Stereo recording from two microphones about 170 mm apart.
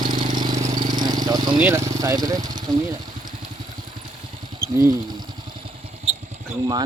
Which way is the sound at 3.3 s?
30° right (ahead or behind).